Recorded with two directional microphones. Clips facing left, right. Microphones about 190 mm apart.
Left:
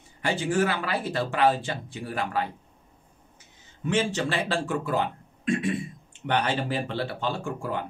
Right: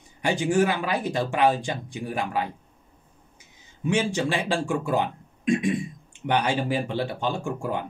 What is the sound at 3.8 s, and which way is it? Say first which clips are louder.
Speech: right 2 dB; 10° right (ahead or behind).